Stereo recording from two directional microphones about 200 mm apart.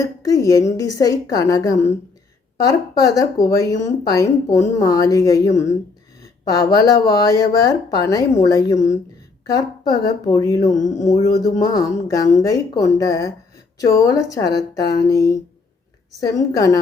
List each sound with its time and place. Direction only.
0.0 s speech: 15° left (ahead or behind)
10.8 s a sound: 40° left (ahead or behind)
11.2 s speech: 20° left (ahead or behind)